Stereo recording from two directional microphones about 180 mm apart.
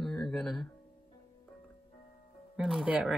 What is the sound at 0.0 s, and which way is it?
Music, 5° left (ahead or behind).